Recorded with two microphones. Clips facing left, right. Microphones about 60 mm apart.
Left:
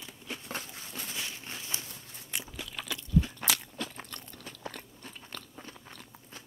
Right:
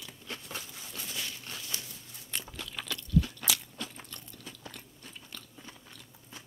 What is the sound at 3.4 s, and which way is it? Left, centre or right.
Crunch, left.